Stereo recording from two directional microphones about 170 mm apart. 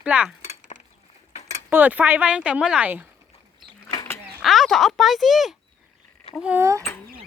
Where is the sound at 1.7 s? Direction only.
10° right (ahead or behind).